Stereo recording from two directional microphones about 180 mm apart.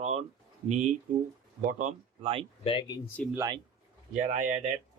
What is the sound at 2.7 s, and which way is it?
Speech, 25° left (ahead or behind).